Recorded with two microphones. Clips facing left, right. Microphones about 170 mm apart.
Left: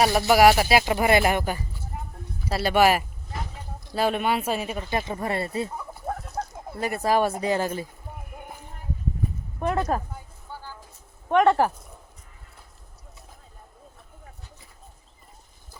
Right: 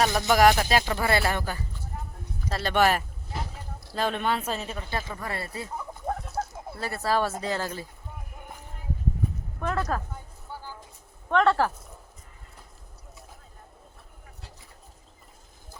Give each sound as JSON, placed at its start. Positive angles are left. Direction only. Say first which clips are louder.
{"t": 0.0, "sound": "speech", "louder": "left 3 dB", "side_deg": 10}
{"t": 5.7, "sound": "chicken", "louder": "even", "side_deg": 0}
{"t": 6.7, "sound": "speech", "louder": "left 6 dB", "side_deg": 15}
{"t": 9.6, "sound": "speech", "louder": "left 4 dB", "side_deg": 20}
{"t": 10.5, "sound": "vehicle", "louder": "even", "side_deg": -15}
{"t": 11.3, "sound": "speech", "louder": "left 3 dB", "side_deg": 15}